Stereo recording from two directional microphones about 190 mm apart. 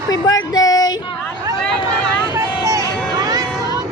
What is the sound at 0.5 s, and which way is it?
Child singing, 20° left (ahead or behind).